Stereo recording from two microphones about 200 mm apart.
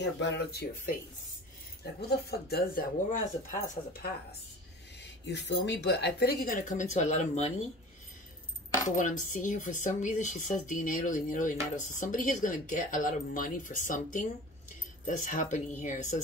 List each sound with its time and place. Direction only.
0.2 s speech: 55° left (ahead or behind)
2.0 s speech: 50° left (ahead or behind)
5.0 s speech: 60° left (ahead or behind); by 7.5 s 35° left (ahead or behind)
8.9 s speech: 40° left (ahead or behind)